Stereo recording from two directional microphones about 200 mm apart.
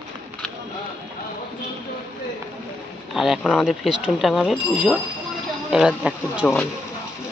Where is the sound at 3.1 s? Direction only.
Centre (ahead or behind).